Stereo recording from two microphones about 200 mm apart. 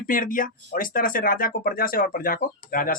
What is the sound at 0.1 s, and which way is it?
Speech, 45° left (ahead or behind).